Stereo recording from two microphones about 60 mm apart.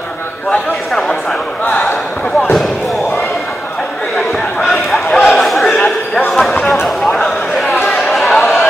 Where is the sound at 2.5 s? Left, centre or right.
Centre.